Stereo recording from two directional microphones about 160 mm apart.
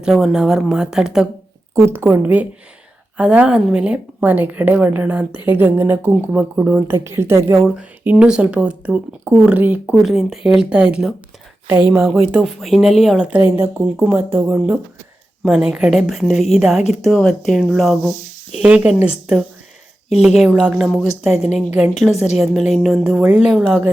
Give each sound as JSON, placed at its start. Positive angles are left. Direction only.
{"t": 0.0, "sound": "speech", "side_deg": -5}
{"t": 1.7, "sound": "a woman's voice", "side_deg": -15}
{"t": 20.2, "sound": "speech", "side_deg": 0}
{"t": 21.4, "sound": "a woman's voice", "side_deg": 45}
{"t": 22.7, "sound": "speech", "side_deg": 0}